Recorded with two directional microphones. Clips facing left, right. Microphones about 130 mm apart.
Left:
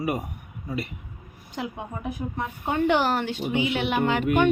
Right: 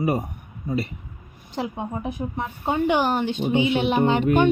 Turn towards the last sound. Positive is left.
turn(degrees=-25)  # may be behind; listen again after turning